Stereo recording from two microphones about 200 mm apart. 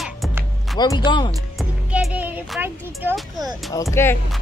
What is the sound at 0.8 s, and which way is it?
Speech, 20° left (ahead or behind).